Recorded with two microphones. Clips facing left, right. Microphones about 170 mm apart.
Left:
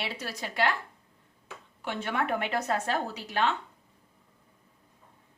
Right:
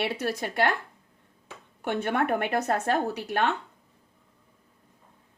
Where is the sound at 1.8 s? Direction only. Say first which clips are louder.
Right 5 dB; 55° right (ahead or behind).